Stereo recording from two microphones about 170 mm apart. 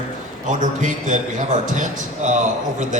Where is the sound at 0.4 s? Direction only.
45° right (ahead or behind).